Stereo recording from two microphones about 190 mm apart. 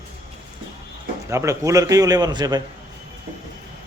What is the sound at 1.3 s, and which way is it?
A man's voice, 15° right (ahead or behind).